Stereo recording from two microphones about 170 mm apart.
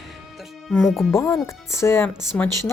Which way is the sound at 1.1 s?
15° left (ahead or behind).